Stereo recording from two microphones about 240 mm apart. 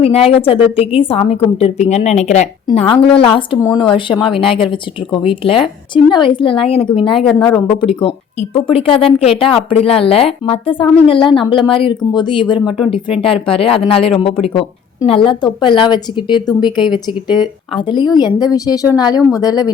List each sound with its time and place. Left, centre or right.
0.0 s speech: left
7.1 s a woman's voice: centre
7.5 s speech: centre
12.5 s a woman's voice: centre
13.2 s a woman's voice: left